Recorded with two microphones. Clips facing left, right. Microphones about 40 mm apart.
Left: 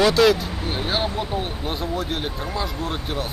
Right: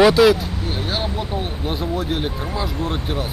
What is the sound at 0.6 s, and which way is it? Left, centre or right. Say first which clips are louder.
Speech: left 1 dB; centre.